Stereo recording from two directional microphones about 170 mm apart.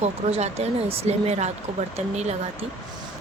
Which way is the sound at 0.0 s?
40° right (ahead or behind).